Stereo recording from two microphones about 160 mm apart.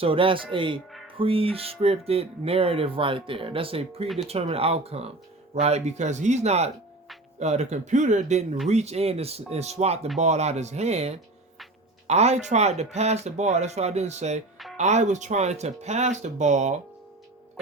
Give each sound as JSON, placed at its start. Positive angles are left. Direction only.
{"t": 0.0, "sound": "speech", "side_deg": -35}